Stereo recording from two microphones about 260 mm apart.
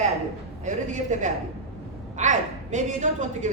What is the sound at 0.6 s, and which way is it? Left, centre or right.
A woman's voice, right.